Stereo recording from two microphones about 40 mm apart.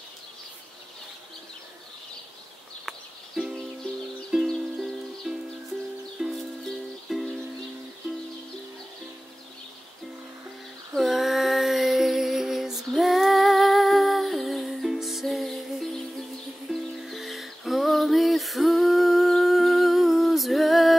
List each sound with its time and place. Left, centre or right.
2.8 s a sound: centre
4.3 s music: centre
4.7 s music: centre
6.2 s music: centre
11.0 s female singing: centre
16.7 s music: centre